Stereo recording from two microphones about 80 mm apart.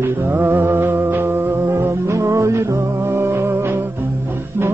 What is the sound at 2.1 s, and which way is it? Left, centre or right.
Music, right.